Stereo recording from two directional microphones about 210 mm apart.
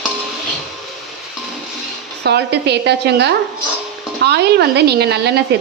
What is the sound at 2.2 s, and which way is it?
A woman's voice, 50° right (ahead or behind).